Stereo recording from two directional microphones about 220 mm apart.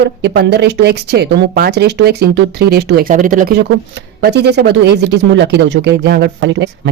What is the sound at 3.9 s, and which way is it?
A woman's voice, 50° right (ahead or behind).